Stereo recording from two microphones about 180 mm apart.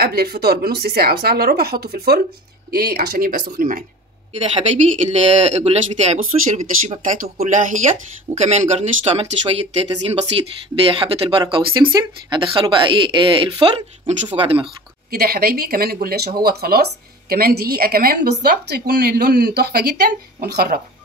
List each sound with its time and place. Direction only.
0.0 s a woman's voice: 60° right (ahead or behind)
4.4 s speech: 35° right (ahead or behind)
15.0 s a woman's voice: 55° right (ahead or behind)